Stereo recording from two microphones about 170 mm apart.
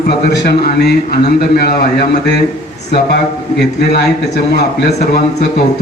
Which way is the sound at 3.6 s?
75° left (ahead or behind).